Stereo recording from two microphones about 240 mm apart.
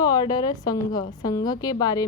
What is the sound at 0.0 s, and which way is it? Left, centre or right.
A woman's voice, centre.